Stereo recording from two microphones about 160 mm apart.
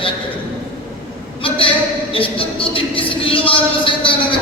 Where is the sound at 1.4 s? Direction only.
35° left (ahead or behind).